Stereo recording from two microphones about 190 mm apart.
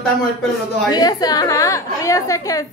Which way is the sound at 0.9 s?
20° left (ahead or behind).